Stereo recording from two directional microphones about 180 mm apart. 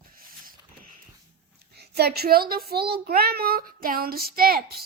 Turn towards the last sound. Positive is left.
turn(degrees=-55)  # may be behind; listen again after turning